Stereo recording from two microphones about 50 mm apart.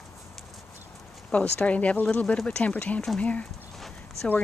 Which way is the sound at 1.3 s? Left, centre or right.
Left.